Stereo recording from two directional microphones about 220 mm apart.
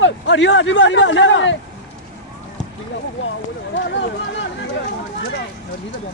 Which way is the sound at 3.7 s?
55° left (ahead or behind).